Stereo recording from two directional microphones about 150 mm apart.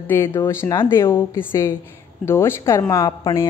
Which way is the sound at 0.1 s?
15° left (ahead or behind).